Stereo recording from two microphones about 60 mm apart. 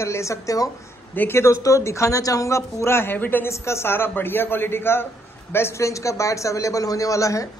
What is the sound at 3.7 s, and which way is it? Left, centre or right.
A man's voice, left.